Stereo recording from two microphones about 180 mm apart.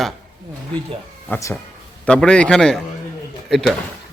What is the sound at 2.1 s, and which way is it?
A man's voice, 5° left (ahead or behind).